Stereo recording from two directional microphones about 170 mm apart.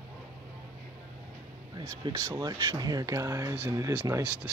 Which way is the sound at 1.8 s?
20° right (ahead or behind).